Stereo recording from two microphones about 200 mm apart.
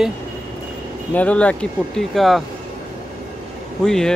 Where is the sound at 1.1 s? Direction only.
5° left (ahead or behind).